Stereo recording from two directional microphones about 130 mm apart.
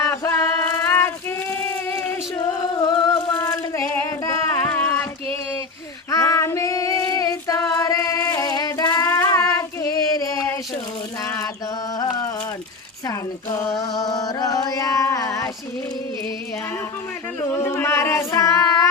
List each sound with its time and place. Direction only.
0.0 s child singing: 20° left (ahead or behind)
6.1 s female singing: 25° left (ahead or behind)
13.6 s carnatic music: 25° left (ahead or behind)
17.5 s singing: 20° left (ahead or behind)